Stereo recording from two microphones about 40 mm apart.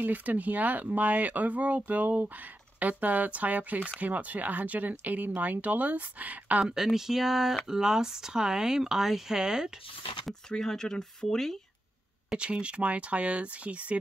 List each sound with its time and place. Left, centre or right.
0.0 s speech: right
6.6 s speech: centre
10.6 s speech: centre
12.3 s speech: right